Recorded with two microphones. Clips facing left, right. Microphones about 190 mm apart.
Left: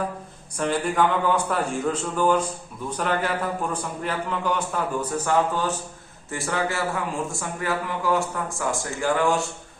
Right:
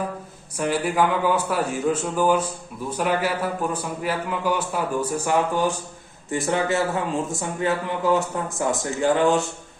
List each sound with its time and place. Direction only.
0.6 s a man's voice: 10° right (ahead or behind)